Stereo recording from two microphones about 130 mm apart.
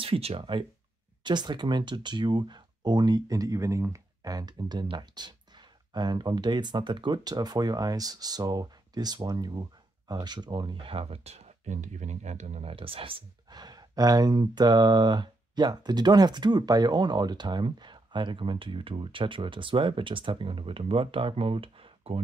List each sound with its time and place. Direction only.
0.0 s speech: 45° right (ahead or behind)
12.7 s speech: 45° right (ahead or behind)